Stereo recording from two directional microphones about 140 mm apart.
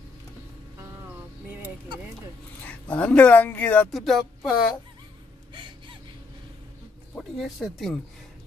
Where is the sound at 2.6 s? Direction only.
10° left (ahead or behind).